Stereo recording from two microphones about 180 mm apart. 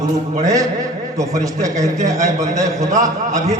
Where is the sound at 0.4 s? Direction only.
20° right (ahead or behind).